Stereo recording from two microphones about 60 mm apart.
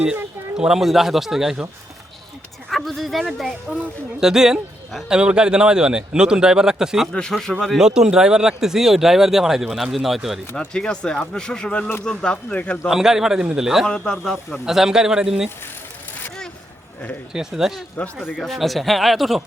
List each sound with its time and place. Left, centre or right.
0.5 s speech: centre
2.6 s a sound: centre
4.2 s speech: centre
7.1 s speech: centre
7.8 s speech: centre
10.5 s speech: centre
12.9 s speech: centre
13.8 s speech: centre
14.6 s speech: centre
17.3 s speech: centre